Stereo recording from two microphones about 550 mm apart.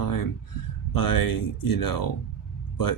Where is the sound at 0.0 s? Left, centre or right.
Left.